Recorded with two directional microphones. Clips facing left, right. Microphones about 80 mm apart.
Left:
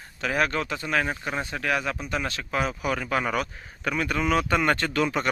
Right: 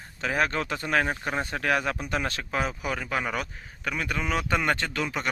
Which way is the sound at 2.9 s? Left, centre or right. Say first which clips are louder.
Left 4 dB; centre.